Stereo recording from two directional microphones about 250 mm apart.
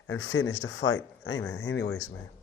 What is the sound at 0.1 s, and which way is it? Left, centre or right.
Speech, left.